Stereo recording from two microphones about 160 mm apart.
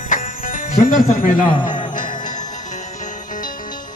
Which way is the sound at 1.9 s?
55° left (ahead or behind).